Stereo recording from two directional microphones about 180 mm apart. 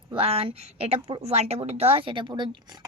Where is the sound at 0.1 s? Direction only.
30° right (ahead or behind).